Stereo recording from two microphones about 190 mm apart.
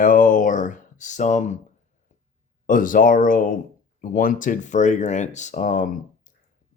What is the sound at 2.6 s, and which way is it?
Speech, 45° left (ahead or behind).